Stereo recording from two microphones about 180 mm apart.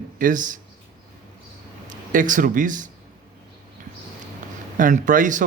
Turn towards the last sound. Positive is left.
turn(degrees=-45)  # may be behind; listen again after turning